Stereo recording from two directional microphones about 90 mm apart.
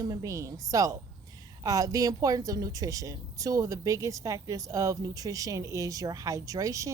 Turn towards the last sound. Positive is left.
turn(degrees=-35)  # may be behind; listen again after turning